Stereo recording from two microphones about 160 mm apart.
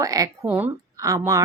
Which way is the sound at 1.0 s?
20° right (ahead or behind).